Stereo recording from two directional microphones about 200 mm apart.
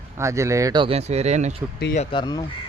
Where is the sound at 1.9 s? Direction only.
30° left (ahead or behind).